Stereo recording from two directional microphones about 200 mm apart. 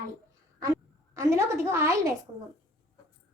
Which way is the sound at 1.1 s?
15° right (ahead or behind).